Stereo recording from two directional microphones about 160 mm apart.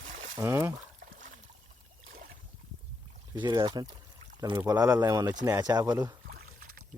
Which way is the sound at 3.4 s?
30° right (ahead or behind).